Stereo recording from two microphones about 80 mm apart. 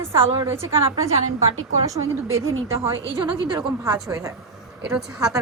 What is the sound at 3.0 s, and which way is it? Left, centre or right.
Speech, right.